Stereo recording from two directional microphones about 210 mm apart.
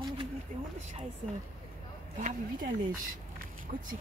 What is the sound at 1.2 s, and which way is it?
Speech, 35° right (ahead or behind).